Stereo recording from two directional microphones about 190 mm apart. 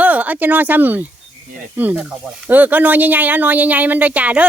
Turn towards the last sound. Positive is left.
turn(degrees=-5)  # may be behind; listen again after turning